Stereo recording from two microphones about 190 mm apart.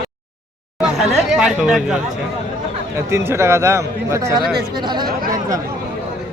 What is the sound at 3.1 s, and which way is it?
A man's voice, 15° right (ahead or behind).